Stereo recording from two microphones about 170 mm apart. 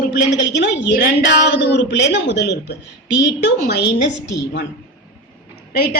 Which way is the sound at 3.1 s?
90° left.